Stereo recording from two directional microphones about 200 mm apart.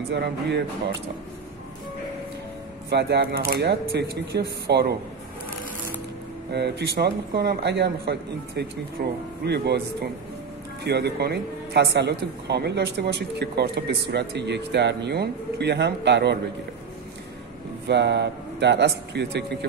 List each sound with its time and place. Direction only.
0.1 s speech: 60° right (ahead or behind)
2.9 s speech: 55° right (ahead or behind)
6.5 s speech: 55° right (ahead or behind)
10.8 s speech: 55° right (ahead or behind)
17.8 s speech: 60° right (ahead or behind)